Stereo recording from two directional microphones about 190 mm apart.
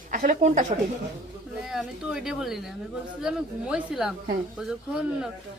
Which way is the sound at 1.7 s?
Centre (ahead or behind).